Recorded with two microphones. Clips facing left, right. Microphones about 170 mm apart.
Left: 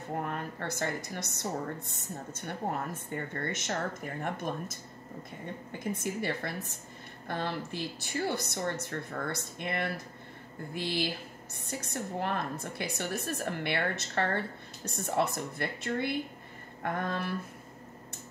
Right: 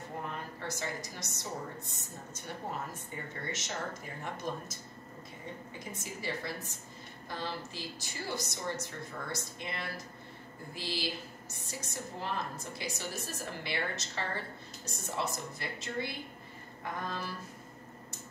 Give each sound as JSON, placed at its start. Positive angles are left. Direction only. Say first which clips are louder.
{"t": 0.2, "sound": "a woman's voice", "louder": "left 5 dB", "side_deg": 55}
{"t": 3.1, "sound": "a woman's voice", "louder": "left 5 dB", "side_deg": 55}
{"t": 5.9, "sound": "a woman's voice", "louder": "left 3 dB", "side_deg": 55}